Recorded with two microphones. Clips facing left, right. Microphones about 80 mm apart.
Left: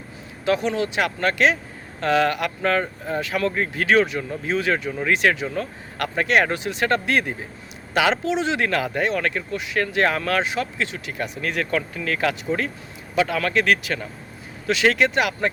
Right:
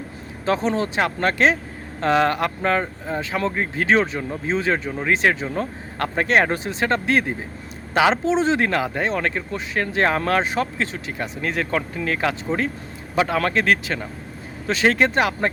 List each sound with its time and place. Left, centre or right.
0.4 s speech: right